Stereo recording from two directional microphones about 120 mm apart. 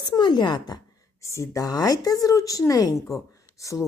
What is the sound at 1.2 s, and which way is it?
Speech, 25° left (ahead or behind).